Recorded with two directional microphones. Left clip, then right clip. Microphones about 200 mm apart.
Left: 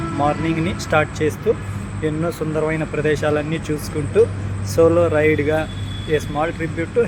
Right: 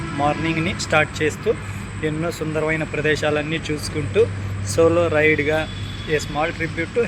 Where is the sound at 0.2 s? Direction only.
5° left (ahead or behind).